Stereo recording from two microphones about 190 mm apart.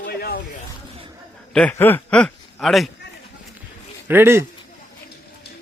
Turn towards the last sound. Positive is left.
turn(degrees=-10)  # may be behind; listen again after turning